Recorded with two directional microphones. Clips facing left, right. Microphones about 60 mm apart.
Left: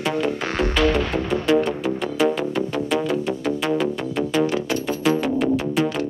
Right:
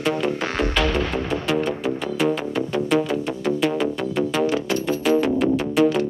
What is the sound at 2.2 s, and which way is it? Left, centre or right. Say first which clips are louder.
Music: left 2 dB; centre.